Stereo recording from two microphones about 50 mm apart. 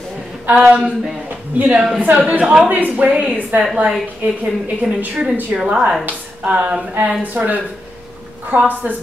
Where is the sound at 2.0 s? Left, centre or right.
Right.